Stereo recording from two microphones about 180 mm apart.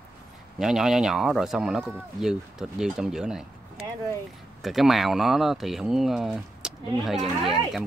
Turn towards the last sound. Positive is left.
turn(degrees=0)  # may be behind; listen again after turning